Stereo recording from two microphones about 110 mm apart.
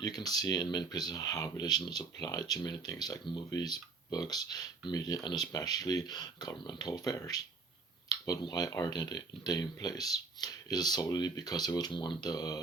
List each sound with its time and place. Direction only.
0.0 s speech: 35° left (ahead or behind)